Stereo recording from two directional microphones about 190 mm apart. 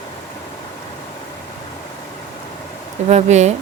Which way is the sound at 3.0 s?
35° right (ahead or behind).